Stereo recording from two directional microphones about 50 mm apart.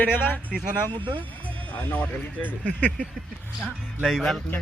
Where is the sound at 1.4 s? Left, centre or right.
Left.